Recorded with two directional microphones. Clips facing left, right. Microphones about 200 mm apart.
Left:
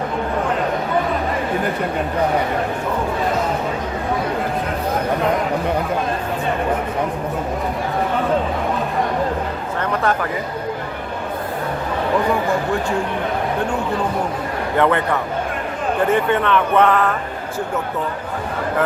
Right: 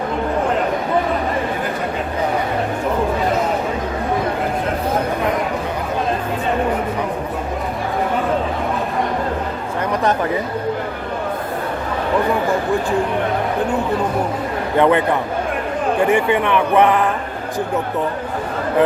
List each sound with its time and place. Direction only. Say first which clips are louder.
9.9 s chatter: right 2 dB; 20° right (ahead or behind)
14.8 s speech: right 3 dB; 15° right (ahead or behind)